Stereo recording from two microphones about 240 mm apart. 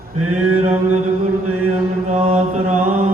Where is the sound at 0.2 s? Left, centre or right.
Right.